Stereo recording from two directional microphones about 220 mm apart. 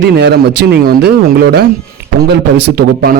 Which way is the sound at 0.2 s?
50° right (ahead or behind).